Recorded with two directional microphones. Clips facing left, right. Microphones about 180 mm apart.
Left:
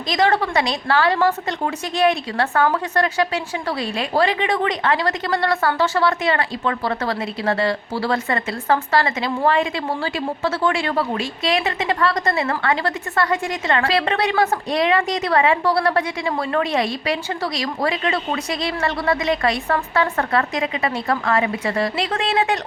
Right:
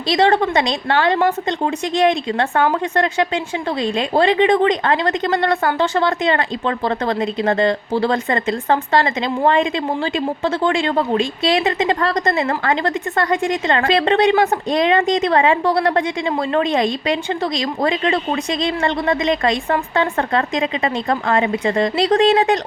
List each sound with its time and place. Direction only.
0.1 s a woman's voice: 30° right (ahead or behind)
7.2 s a woman's voice: 40° right (ahead or behind)
7.7 s a woman's voice: 25° right (ahead or behind)